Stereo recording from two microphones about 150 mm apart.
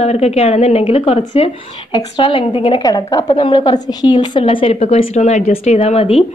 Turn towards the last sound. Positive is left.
turn(degrees=40)  # may be behind; listen again after turning